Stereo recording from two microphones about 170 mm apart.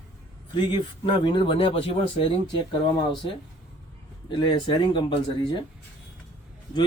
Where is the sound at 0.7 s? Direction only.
25° left (ahead or behind).